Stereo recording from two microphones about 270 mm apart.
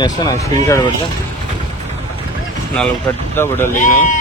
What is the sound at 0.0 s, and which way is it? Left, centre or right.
Speech, centre.